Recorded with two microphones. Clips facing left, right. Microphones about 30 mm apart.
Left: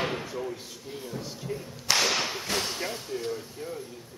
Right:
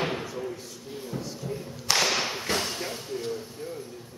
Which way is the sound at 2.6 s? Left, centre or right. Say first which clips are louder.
Even; centre.